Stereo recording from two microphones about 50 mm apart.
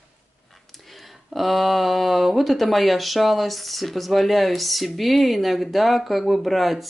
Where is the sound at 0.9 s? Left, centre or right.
Centre.